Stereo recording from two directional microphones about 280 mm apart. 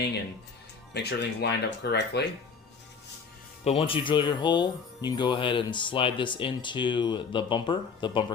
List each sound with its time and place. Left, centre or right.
0.9 s speech: left
3.6 s speech: left